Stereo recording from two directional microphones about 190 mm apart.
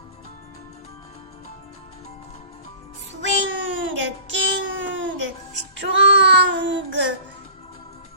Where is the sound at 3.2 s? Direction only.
75° right (ahead or behind).